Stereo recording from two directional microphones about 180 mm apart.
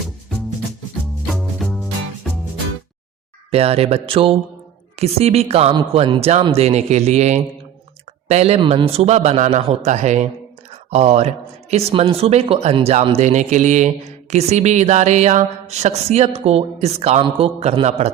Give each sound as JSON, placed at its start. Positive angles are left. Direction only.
{"t": 1.3, "sound": "music", "side_deg": 0}
{"t": 3.5, "sound": "speech", "side_deg": -35}